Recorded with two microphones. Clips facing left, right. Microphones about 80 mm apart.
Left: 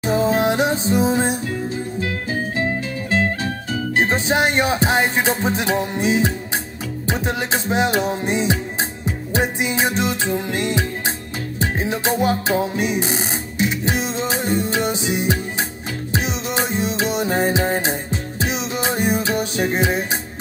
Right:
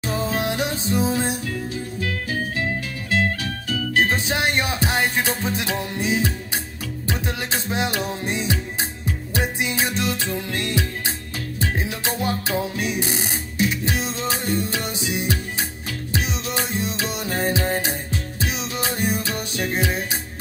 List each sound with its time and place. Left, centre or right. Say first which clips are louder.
0.0 s music: left 7 dB; left